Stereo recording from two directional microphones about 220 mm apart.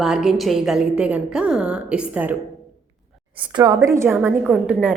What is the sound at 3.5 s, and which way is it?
A woman's voice, 15° right (ahead or behind).